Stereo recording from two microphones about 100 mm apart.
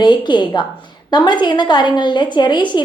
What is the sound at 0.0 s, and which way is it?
A woman's voice, 50° left (ahead or behind).